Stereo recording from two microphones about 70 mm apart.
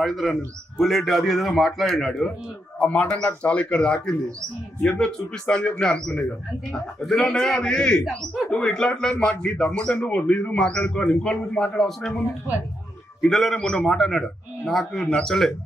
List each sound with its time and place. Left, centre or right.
0.0 s a man's voice: centre
2.8 s speech: left
13.2 s a man's voice: centre